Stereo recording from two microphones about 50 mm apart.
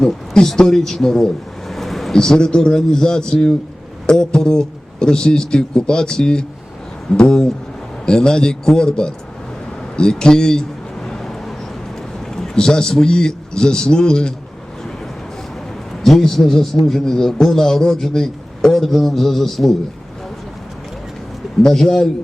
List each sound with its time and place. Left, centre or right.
0.0 s a man's voice: centre
9.9 s a sound: centre
12.3 s a man's voice: centre
16.0 s a man's voice: centre
21.6 s a man's voice: centre